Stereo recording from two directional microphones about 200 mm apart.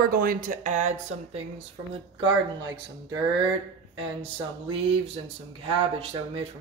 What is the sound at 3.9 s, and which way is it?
Speech, 25° right (ahead or behind).